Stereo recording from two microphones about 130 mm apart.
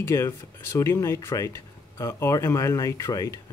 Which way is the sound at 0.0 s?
20° left (ahead or behind).